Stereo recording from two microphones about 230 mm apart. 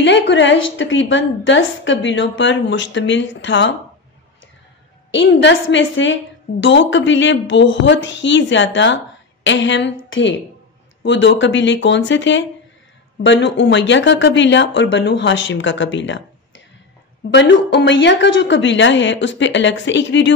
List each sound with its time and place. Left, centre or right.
0.0 s a woman's voice: left
5.1 s a woman's voice: left